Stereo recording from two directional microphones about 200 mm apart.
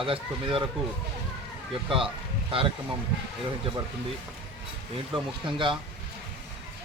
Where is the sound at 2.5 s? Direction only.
25° right (ahead or behind).